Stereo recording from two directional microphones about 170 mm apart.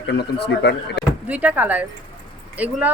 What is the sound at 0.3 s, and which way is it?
Speech, 80° left.